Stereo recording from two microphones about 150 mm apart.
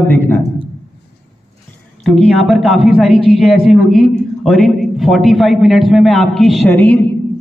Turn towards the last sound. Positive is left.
turn(degrees=10)  # may be behind; listen again after turning